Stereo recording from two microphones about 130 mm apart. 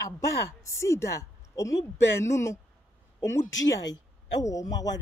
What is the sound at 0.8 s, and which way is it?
Speech, 20° left (ahead or behind).